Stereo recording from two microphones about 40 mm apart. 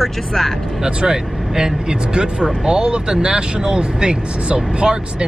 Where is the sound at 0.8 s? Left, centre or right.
Centre.